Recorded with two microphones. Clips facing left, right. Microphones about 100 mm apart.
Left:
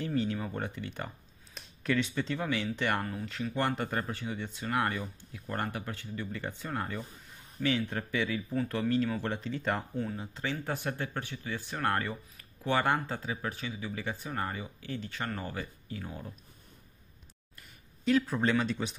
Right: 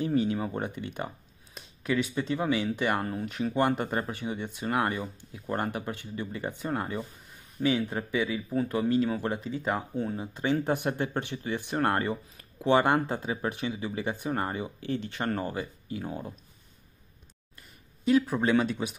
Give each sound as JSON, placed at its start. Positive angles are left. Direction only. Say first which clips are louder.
{"t": 0.0, "sound": "a sound", "louder": "right 5 dB", "side_deg": -20}
{"t": 0.6, "sound": "speech", "louder": "right 4 dB", "side_deg": -15}
{"t": 3.0, "sound": "speech", "louder": "right 4 dB", "side_deg": -35}
{"t": 3.5, "sound": "speech", "louder": "right 5 dB", "side_deg": -15}
{"t": 7.6, "sound": "speech", "louder": "right 4 dB", "side_deg": -30}
{"t": 7.9, "sound": "speech", "louder": "right 3 dB", "side_deg": -15}
{"t": 16.0, "sound": "speech", "louder": "right 7 dB", "side_deg": -35}
{"t": 18.0, "sound": "speech", "louder": "right 3 dB", "side_deg": -10}